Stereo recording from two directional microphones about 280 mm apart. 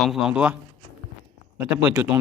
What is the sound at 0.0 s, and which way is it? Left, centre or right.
Speech, centre.